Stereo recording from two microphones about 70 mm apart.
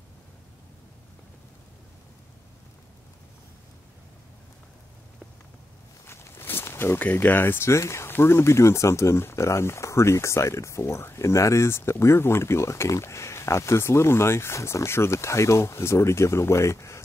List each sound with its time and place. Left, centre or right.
6.0 s walk: left
7.0 s speech: left